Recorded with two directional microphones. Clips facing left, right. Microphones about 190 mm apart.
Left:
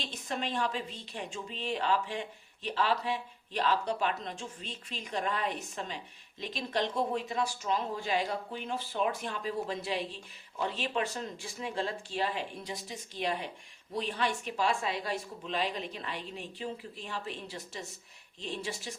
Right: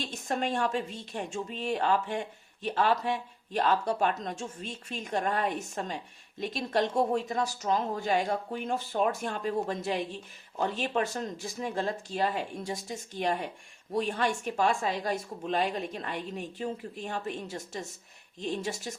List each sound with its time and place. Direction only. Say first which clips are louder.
0.0 s a woman's voice: right 5 dB; 45° right (ahead or behind)